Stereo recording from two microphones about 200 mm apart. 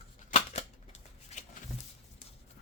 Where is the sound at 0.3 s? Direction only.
35° left (ahead or behind).